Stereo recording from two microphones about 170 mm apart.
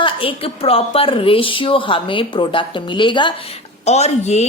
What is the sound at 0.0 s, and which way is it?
A woman's voice, 30° left (ahead or behind).